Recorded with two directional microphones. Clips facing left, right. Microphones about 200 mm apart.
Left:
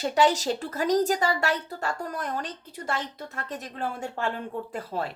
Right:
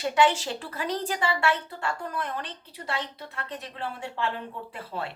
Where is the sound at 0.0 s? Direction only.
40° left (ahead or behind).